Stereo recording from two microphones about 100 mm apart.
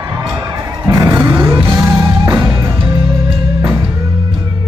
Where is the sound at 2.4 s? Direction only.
30° right (ahead or behind).